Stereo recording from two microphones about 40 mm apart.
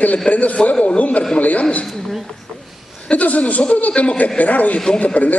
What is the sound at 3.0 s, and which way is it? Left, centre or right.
A man's voice, left.